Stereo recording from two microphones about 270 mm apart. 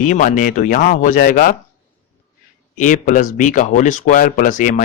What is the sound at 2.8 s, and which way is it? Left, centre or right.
Speech, left.